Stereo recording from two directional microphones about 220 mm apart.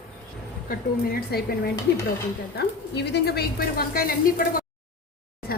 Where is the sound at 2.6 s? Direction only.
50° left (ahead or behind).